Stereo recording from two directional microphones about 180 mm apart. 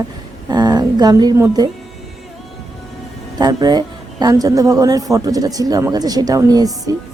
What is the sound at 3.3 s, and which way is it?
A woman's voice, 20° right (ahead or behind).